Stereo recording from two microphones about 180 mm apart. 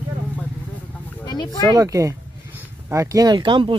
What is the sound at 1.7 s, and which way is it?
Speech, 20° right (ahead or behind).